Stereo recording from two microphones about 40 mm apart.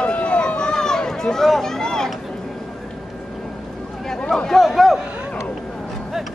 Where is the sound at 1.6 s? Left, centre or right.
Centre.